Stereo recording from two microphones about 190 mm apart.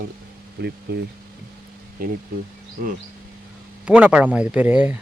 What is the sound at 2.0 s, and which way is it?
Speech, 50° right (ahead or behind).